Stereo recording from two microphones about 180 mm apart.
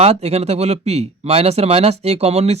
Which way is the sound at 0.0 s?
35° right (ahead or behind).